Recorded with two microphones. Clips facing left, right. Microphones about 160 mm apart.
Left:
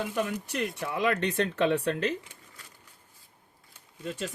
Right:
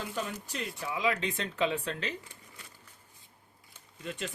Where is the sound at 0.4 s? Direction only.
70° left (ahead or behind).